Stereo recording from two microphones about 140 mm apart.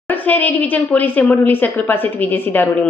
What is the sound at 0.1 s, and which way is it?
Speech, 10° left (ahead or behind).